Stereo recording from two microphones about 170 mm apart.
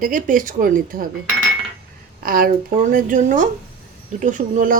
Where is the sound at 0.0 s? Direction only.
50° right (ahead or behind).